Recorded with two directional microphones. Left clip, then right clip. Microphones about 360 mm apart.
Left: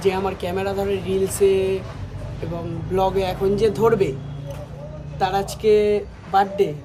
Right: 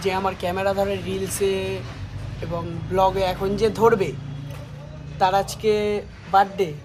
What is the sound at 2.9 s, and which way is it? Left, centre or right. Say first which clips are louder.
Speech: right 1 dB; centre.